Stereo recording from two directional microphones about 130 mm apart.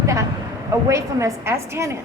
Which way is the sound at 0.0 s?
25° right (ahead or behind).